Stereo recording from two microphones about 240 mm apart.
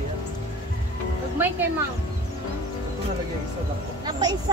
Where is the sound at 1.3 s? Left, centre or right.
Centre.